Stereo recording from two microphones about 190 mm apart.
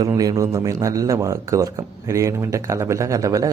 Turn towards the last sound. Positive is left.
turn(degrees=-15)  # may be behind; listen again after turning